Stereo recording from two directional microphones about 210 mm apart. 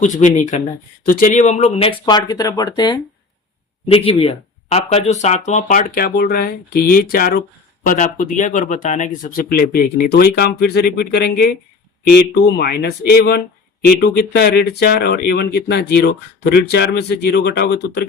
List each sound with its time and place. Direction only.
0.0 s speech: 35° left (ahead or behind); by 18.0 s 50° left (ahead or behind)